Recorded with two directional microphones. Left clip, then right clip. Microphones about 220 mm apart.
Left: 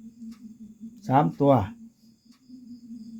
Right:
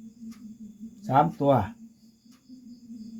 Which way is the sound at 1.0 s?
50° left (ahead or behind).